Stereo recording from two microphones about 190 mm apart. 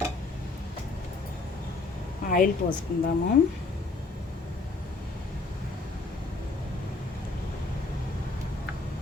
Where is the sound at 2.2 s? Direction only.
45° left (ahead or behind).